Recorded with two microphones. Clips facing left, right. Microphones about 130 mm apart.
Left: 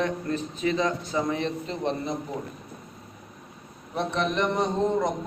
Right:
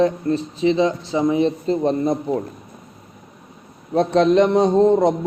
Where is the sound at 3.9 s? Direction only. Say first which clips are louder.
Right 12 dB; 90° right.